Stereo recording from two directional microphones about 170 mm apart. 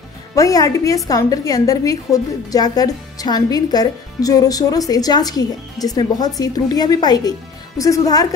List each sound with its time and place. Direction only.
0.4 s a woman's voice: 20° left (ahead or behind)